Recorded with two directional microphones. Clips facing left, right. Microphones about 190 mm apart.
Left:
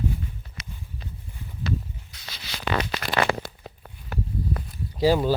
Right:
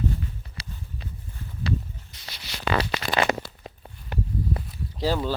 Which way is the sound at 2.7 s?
20° right (ahead or behind).